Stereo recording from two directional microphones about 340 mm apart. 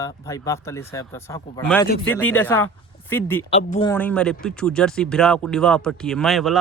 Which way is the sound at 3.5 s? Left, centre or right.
Centre.